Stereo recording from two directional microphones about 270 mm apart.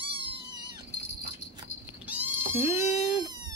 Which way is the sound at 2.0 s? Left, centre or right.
Centre.